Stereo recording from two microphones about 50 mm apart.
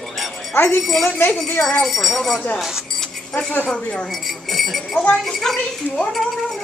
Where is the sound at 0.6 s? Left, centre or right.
Left.